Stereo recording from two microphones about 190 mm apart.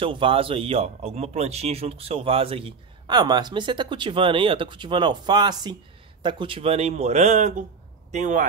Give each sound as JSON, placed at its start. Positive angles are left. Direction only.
{"t": 0.0, "sound": "speech", "side_deg": -30}